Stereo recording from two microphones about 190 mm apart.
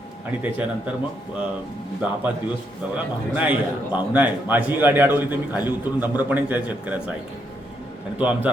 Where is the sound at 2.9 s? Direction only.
5° right (ahead or behind).